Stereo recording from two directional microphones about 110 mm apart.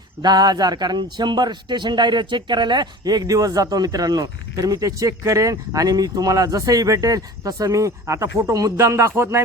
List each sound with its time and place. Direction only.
0.2 s a man's voice: 40° right (ahead or behind)